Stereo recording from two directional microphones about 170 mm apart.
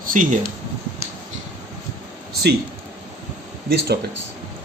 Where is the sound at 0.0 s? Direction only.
50° right (ahead or behind).